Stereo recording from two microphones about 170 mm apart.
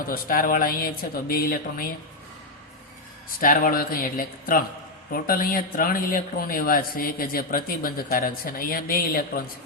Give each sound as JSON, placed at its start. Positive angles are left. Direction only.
{"t": 0.0, "sound": "speech", "side_deg": 60}
{"t": 3.4, "sound": "speech", "side_deg": 55}